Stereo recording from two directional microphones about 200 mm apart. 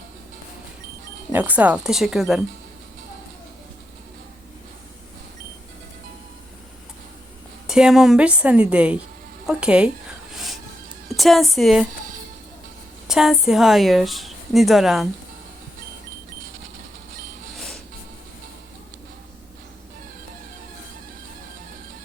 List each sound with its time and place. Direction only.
1.3 s speech: 10° right (ahead or behind)
7.7 s speech: 5° right (ahead or behind)
10.3 s music: centre (ahead or behind)
11.2 s speech: centre (ahead or behind)
13.1 s speech: centre (ahead or behind)